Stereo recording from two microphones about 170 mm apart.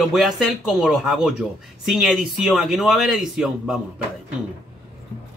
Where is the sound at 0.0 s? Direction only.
Centre (ahead or behind).